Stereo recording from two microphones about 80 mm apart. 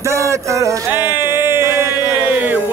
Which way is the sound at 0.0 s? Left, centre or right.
Right.